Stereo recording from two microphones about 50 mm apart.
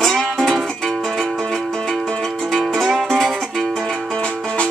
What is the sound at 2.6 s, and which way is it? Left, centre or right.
Music, centre.